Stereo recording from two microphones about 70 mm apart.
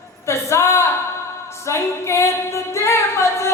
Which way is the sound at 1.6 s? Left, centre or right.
Left.